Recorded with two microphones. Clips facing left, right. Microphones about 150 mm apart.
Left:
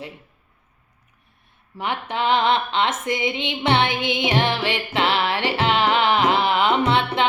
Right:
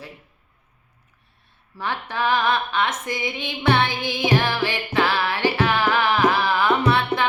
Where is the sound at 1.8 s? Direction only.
20° left (ahead or behind).